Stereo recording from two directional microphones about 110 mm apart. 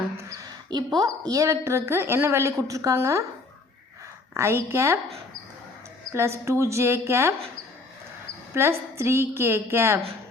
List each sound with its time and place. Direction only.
0.3 s a woman's voice: 35° right (ahead or behind)
4.4 s a woman's voice: 25° right (ahead or behind)
6.1 s a woman's voice: 25° right (ahead or behind)
8.5 s a woman's voice: 25° right (ahead or behind)